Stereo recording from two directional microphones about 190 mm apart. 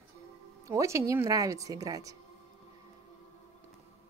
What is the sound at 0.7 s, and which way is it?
Speech, 15° right (ahead or behind).